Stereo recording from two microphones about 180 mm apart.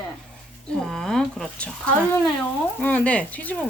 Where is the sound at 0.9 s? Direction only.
5° left (ahead or behind).